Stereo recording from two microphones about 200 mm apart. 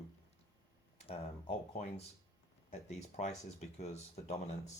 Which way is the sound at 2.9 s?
35° left (ahead or behind).